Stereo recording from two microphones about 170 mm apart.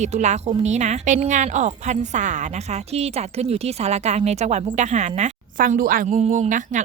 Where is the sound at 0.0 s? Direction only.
45° right (ahead or behind).